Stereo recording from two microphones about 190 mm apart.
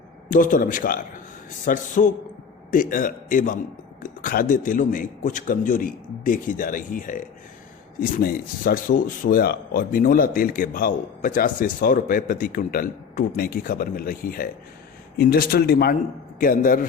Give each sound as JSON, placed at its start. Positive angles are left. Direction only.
{"t": 0.3, "sound": "speech", "side_deg": 45}